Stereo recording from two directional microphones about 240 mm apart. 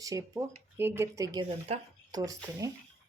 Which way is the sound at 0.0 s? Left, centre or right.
Centre.